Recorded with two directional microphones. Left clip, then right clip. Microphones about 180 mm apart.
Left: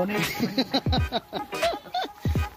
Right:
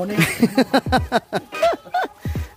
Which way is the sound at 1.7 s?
45° right (ahead or behind).